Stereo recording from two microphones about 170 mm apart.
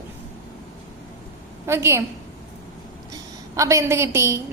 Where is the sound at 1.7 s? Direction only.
15° right (ahead or behind).